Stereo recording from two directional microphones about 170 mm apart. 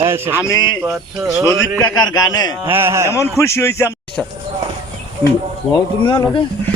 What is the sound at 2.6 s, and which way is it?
Speech, 15° right (ahead or behind).